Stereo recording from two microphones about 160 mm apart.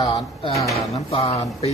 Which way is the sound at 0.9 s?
40° left (ahead or behind).